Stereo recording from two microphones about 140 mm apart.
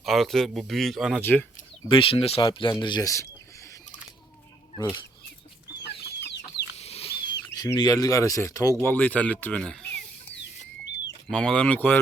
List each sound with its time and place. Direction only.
0.0 s speech: centre (ahead or behind)
1.2 s speech: 15° left (ahead or behind)
1.9 s speech: 40° left (ahead or behind)
2.8 s a sound: 30° left (ahead or behind)
4.8 s speech: 30° left (ahead or behind)
6.7 s rodents: 45° left (ahead or behind); by 8.7 s 20° left (ahead or behind)
8.8 s speech: 10° left (ahead or behind)
11.3 s speech: 5° left (ahead or behind)